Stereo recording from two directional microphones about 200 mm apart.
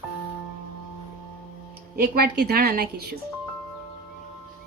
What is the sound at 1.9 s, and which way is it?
A woman's voice, 50° right (ahead or behind).